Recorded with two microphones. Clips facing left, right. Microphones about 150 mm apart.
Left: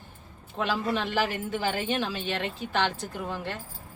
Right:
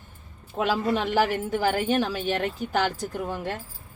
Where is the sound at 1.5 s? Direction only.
45° right (ahead or behind).